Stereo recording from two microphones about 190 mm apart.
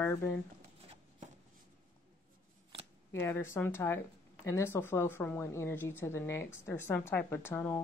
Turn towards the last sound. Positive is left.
turn(degrees=10)  # may be behind; listen again after turning